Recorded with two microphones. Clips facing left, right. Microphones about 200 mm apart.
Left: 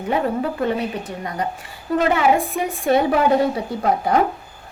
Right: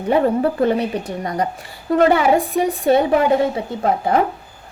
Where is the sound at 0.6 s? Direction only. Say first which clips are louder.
Right 4 dB; 35° right (ahead or behind).